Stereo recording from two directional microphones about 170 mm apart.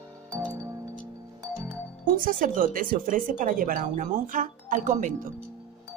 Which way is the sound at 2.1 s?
55° right (ahead or behind).